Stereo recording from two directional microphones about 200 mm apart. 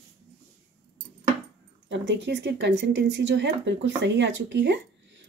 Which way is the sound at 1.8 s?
60° right (ahead or behind).